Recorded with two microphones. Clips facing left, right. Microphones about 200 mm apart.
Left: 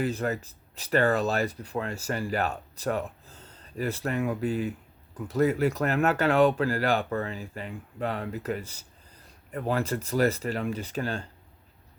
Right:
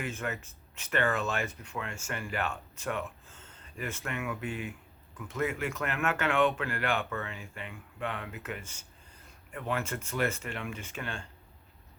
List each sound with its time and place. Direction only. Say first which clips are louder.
0.0 s speech: left 8 dB; 35° left (ahead or behind)